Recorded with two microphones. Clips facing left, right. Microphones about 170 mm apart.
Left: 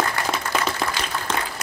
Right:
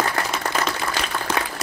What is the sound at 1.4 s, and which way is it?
Applause, 75° right (ahead or behind).